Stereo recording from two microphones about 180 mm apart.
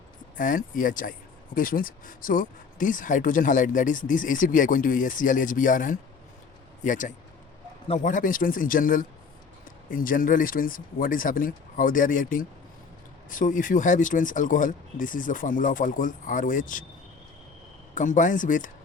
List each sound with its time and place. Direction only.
0.3 s speech: 50° left (ahead or behind)
17.9 s speech: 45° left (ahead or behind)